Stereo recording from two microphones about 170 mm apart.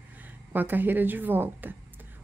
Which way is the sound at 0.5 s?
10° right (ahead or behind).